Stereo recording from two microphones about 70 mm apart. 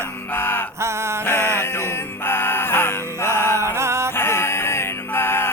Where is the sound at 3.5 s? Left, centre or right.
Right.